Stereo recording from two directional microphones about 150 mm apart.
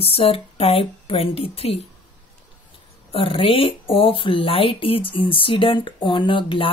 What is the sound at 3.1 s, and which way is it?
Speech, 35° left (ahead or behind).